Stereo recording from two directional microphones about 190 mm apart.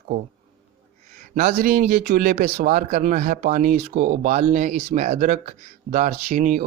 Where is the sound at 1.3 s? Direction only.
45° right (ahead or behind).